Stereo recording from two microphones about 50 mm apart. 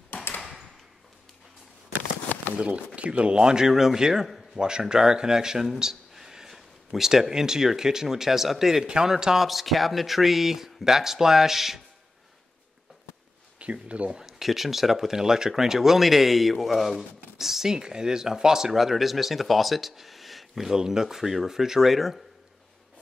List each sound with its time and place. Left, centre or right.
0.1 s a sound: left
2.5 s speech: right; by 11.8 s centre
13.6 s speech: right
14.1 s speech: centre